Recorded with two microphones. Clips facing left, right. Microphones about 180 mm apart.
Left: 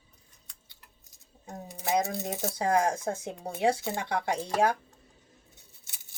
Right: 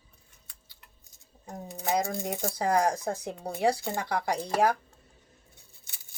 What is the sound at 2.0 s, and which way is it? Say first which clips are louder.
Speech: right 1 dB; 20° left (ahead or behind).